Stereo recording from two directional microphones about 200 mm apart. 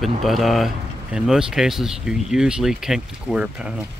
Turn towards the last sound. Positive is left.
turn(degrees=-5)  # may be behind; listen again after turning